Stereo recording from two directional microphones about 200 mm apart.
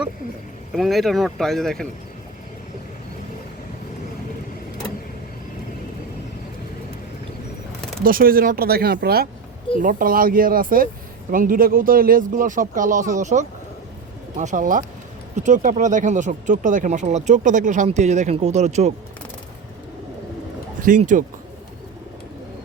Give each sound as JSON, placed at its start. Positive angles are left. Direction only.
{"t": 0.7, "sound": "speech", "side_deg": 0}
{"t": 8.0, "sound": "speech", "side_deg": -45}
{"t": 9.7, "sound": "speech", "side_deg": -40}
{"t": 20.8, "sound": "speech", "side_deg": -40}